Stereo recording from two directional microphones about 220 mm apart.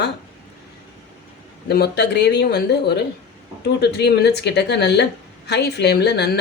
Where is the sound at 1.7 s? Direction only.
50° left (ahead or behind).